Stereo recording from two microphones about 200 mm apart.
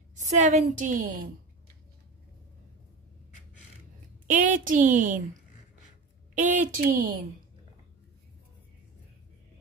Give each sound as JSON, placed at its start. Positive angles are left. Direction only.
{"t": 0.1, "sound": "a woman's voice", "side_deg": -35}
{"t": 4.3, "sound": "speech", "side_deg": -40}
{"t": 6.3, "sound": "a woman's voice", "side_deg": -40}